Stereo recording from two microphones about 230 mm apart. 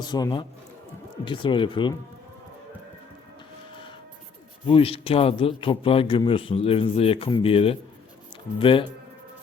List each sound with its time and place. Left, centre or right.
0.1 s a man's voice: centre
4.6 s a man's voice: left